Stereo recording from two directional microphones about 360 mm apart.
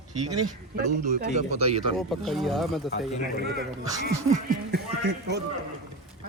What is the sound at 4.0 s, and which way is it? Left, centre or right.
Speech, right.